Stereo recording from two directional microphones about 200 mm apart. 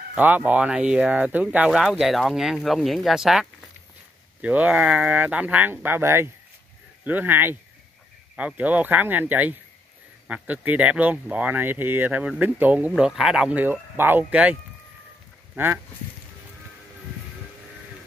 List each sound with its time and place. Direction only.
0.1 s speech: 10° right (ahead or behind)